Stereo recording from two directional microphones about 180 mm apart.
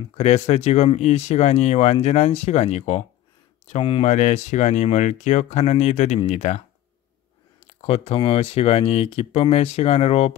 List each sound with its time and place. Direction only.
0.2 s speech: 40° left (ahead or behind)
7.6 s speech: 35° left (ahead or behind)